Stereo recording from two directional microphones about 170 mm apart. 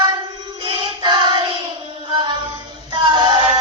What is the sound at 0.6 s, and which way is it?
Child singing, 25° right (ahead or behind).